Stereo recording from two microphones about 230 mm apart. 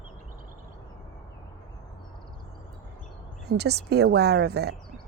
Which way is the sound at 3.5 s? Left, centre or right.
Right.